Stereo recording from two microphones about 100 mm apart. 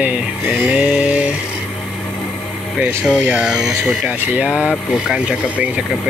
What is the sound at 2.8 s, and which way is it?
Speech, 10° right (ahead or behind).